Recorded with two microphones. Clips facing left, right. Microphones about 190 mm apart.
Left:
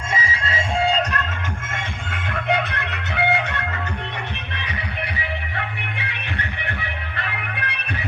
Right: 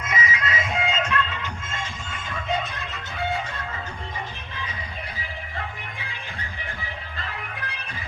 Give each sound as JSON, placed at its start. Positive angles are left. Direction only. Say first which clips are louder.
{"t": 0.1, "sound": "music", "louder": "left 1 dB", "side_deg": 30}
{"t": 1.7, "sound": "music", "louder": "left 3 dB", "side_deg": 60}